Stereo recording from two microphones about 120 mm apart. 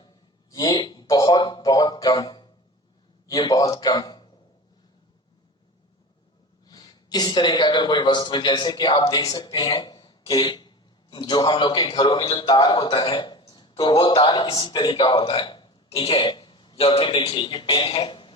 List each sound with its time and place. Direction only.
0.0 s a man's voice: 35° left (ahead or behind)
6.7 s a man's voice: 35° left (ahead or behind)